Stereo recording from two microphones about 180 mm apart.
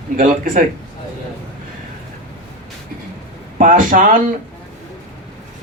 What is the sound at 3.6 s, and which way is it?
Speech, 45° right (ahead or behind).